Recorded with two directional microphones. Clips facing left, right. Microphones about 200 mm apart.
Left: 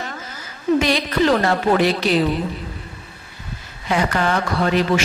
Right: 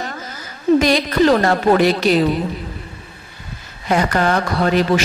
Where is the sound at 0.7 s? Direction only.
40° right (ahead or behind).